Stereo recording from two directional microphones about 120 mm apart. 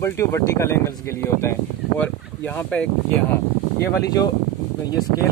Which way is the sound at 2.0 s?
10° left (ahead or behind).